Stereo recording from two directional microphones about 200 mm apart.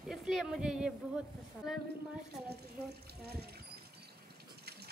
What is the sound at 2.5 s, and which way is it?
Speech, 55° right (ahead or behind).